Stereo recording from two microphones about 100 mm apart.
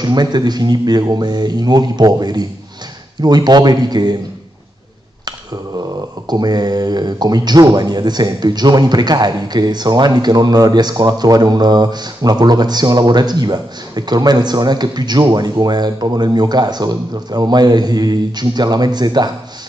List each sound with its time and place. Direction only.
0.0 s speech: 45° right (ahead or behind)
6.2 s speech: 45° right (ahead or behind)